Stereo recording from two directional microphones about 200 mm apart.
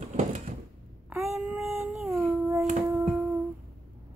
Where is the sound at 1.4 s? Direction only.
Centre (ahead or behind).